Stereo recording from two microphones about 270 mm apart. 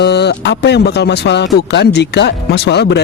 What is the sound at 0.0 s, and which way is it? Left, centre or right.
Speech, left.